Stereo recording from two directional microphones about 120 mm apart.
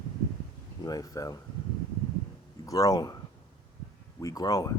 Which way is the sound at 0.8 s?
30° left (ahead or behind).